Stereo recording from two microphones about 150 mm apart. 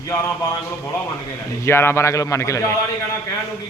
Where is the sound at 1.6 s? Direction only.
15° left (ahead or behind).